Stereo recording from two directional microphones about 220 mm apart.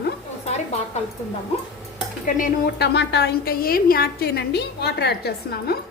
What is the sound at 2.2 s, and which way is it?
A woman's voice, 40° left (ahead or behind).